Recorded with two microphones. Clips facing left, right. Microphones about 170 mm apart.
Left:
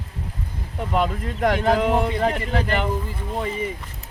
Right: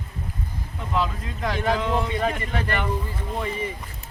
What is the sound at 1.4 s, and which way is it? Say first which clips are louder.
Speech: left 5 dB; 45° left (ahead or behind).